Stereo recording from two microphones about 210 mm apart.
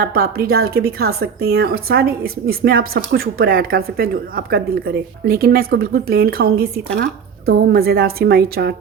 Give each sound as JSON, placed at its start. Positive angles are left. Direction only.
{"t": 0.0, "sound": "a woman's voice", "side_deg": -45}